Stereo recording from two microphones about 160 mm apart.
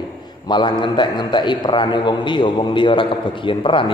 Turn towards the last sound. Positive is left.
turn(degrees=30)  # may be behind; listen again after turning